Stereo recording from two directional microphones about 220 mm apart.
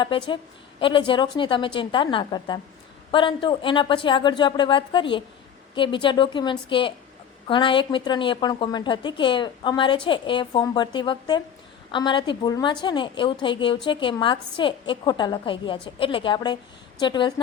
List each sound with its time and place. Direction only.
0.0 s a woman's voice: 20° left (ahead or behind)